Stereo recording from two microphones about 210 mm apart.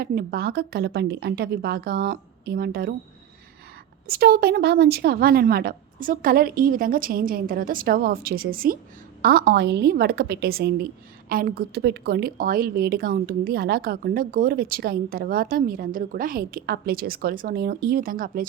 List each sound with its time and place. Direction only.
0.0 s a woman's voice: 50° right (ahead or behind)
4.0 s a woman's voice: 45° right (ahead or behind)